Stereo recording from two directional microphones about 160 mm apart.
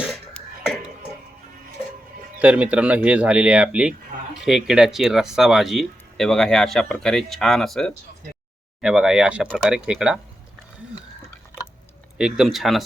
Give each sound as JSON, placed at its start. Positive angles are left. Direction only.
{"t": 0.0, "sound": "throat clearing", "side_deg": 0}
{"t": 2.4, "sound": "speech", "side_deg": -10}
{"t": 12.1, "sound": "speech", "side_deg": -5}